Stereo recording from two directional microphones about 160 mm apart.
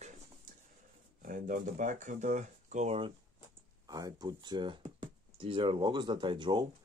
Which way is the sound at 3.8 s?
25° right (ahead or behind).